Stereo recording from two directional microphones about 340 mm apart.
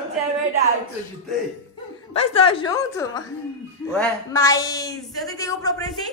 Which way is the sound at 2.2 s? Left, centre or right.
Centre.